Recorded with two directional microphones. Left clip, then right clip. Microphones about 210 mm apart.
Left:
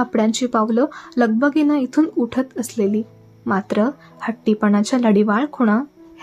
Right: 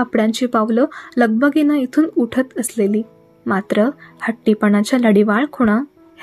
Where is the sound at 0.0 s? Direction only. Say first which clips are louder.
Right 2 dB; 10° right (ahead or behind).